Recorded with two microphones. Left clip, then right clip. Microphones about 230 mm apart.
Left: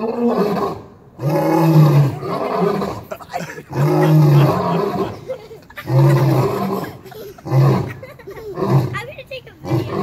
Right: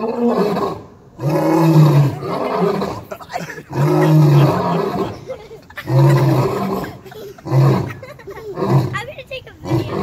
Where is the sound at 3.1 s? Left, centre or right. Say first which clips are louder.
Even; left.